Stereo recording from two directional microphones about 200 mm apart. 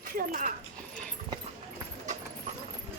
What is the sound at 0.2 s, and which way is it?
Speech, 40° right (ahead or behind).